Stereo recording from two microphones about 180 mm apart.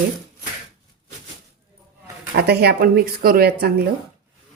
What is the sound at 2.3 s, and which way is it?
Speech, 65° right (ahead or behind).